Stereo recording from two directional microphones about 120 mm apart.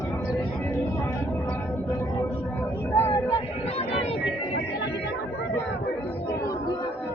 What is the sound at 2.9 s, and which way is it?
Vehicle, 20° left (ahead or behind).